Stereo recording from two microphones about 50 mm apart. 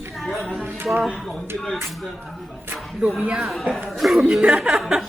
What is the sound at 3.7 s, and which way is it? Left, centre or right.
Speech, centre.